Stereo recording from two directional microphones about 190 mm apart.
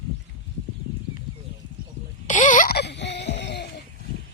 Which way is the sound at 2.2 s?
40° left (ahead or behind).